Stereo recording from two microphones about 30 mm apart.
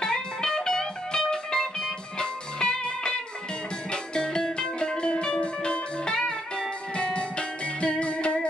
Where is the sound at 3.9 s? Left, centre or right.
Left.